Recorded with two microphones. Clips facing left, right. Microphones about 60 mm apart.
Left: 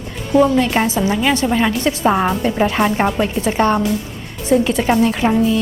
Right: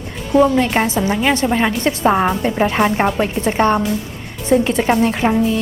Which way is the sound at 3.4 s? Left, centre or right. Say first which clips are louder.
Right 1 dB; right.